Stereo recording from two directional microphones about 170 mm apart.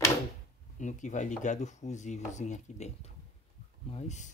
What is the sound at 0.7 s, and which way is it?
Speech, 45° left (ahead or behind).